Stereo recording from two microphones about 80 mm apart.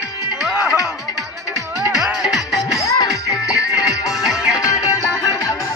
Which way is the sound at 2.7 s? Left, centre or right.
Left.